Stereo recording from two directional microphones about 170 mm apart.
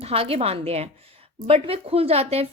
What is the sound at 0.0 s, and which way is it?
Speech, 35° right (ahead or behind).